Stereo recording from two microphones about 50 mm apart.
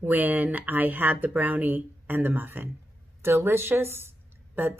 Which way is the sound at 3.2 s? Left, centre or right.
Right.